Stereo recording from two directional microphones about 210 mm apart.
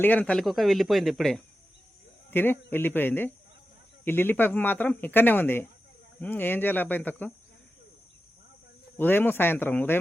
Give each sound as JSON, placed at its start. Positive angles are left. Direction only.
{"t": 0.0, "sound": "speech", "side_deg": 10}
{"t": 9.0, "sound": "speech", "side_deg": 10}